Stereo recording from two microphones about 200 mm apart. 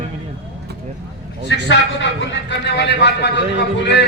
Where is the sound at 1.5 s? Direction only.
60° left (ahead or behind).